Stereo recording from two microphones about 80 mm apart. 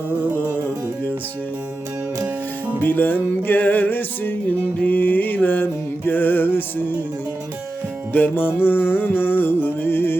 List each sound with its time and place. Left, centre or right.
2.8 s music: left
4.8 s mantra: left
6.1 s music: left
8.1 s music: left